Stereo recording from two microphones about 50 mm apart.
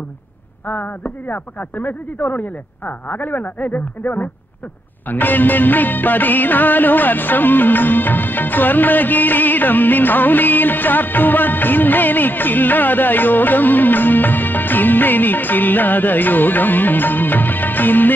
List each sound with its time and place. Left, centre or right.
0.7 s music of bollywood: left